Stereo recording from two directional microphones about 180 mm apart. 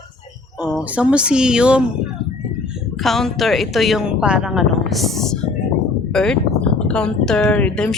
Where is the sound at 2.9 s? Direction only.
Centre (ahead or behind).